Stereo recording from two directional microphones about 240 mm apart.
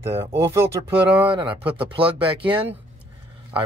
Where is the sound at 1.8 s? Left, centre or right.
Right.